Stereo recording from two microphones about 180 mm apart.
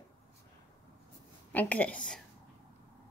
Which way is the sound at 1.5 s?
10° left (ahead or behind).